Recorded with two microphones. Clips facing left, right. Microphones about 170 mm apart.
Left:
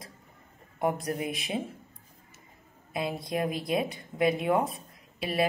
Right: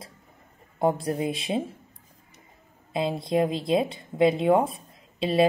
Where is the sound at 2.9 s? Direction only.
25° right (ahead or behind).